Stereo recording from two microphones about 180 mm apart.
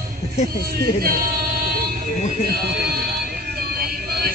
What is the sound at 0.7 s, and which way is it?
Speech, 55° right (ahead or behind).